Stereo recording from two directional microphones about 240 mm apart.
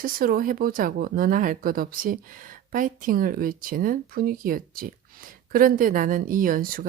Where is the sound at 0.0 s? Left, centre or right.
Right.